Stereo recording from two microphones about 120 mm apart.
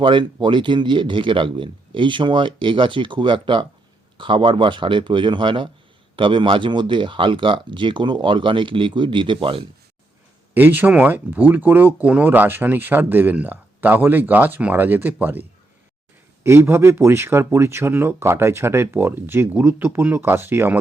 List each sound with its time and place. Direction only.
0.0 s speech: 40° right (ahead or behind)
10.5 s speech: 15° right (ahead or behind)